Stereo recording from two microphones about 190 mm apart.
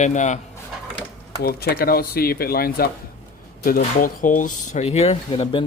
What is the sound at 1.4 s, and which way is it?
Speech, 55° left (ahead or behind).